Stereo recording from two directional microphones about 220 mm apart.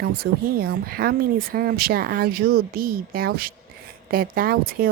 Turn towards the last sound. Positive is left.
turn(degrees=-40)  # may be behind; listen again after turning